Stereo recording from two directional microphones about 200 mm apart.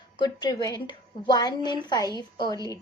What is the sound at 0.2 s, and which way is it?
A woman's voice, 20° left (ahead or behind).